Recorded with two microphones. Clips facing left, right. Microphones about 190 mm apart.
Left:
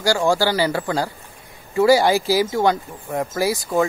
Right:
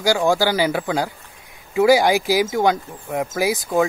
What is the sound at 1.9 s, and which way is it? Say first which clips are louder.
Speech: even; 15° right (ahead or behind).